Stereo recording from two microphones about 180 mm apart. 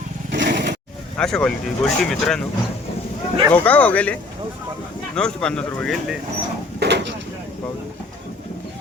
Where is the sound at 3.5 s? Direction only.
10° left (ahead or behind).